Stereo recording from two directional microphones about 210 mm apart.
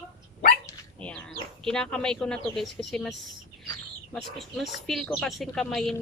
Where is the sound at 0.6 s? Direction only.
5° left (ahead or behind).